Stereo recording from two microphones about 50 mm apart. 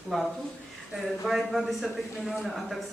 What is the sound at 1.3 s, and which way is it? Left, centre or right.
A woman's voice, centre.